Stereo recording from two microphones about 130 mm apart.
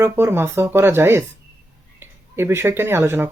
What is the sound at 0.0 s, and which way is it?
Speech, 20° right (ahead or behind).